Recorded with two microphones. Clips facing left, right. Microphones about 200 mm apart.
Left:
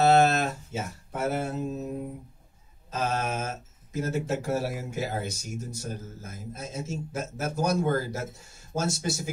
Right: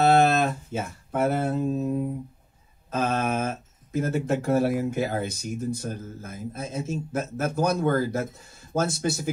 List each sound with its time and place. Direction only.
0.0 s music: 55° right (ahead or behind)
2.9 s speech: 55° right (ahead or behind)